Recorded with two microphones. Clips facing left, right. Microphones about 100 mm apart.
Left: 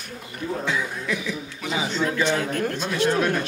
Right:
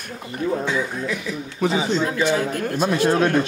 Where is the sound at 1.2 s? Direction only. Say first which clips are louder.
Right 7 dB; 35° right (ahead or behind).